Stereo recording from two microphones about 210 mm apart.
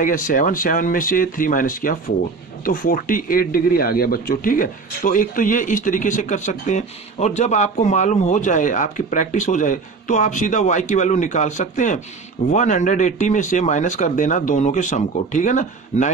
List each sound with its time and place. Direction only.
0.0 s speech: 40° left (ahead or behind)